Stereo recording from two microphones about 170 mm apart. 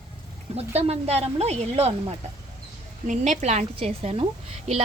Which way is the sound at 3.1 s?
45° right (ahead or behind).